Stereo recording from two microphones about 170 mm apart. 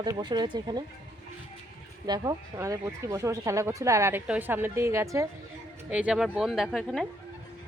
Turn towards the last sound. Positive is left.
turn(degrees=0)  # may be behind; listen again after turning